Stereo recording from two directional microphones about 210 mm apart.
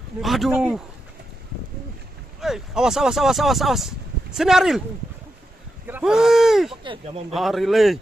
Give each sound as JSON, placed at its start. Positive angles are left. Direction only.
{"t": 0.2, "sound": "speech", "side_deg": 0}
{"t": 2.4, "sound": "speech", "side_deg": 0}
{"t": 5.9, "sound": "speech", "side_deg": -5}
{"t": 6.8, "sound": "speech", "side_deg": -25}
{"t": 7.3, "sound": "speech", "side_deg": 0}